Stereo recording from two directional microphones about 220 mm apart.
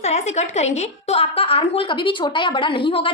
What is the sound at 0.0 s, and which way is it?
A woman's voice, 30° left (ahead or behind).